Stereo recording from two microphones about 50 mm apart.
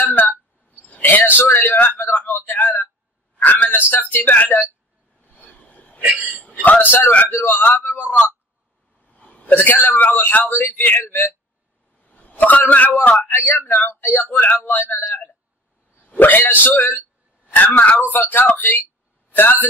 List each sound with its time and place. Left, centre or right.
0.2 s chink: left
1.0 s a man's voice: left
3.3 s a sound: left
4.1 s speech: left
5.2 s train: left
6.0 s speech: right
6.6 s speech: left
9.0 s a sound: left
9.7 s speech: left
12.0 s a man's voice: left
14.3 s speech: left
14.7 s speech: left
16.0 s a man's voice: left